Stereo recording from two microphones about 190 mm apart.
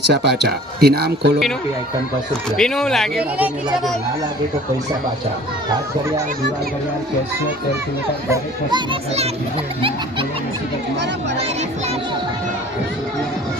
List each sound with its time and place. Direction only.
0.1 s speech: 60° right (ahead or behind)
2.6 s speech: 5° left (ahead or behind)
8.3 s speech: 25° right (ahead or behind)